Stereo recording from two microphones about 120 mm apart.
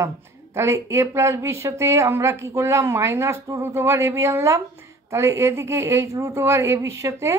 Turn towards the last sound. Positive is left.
turn(degrees=-25)  # may be behind; listen again after turning